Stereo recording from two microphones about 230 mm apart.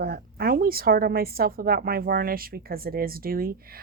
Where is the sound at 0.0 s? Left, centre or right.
Right.